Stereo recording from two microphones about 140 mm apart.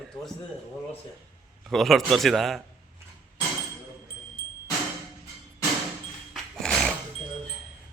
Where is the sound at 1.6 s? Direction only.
Centre (ahead or behind).